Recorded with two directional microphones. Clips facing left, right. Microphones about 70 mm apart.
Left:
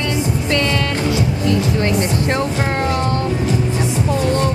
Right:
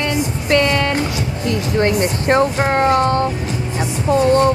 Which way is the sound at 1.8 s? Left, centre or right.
Right.